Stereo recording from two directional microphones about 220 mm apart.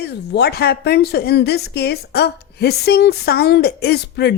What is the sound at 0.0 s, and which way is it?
Speech, 50° left (ahead or behind).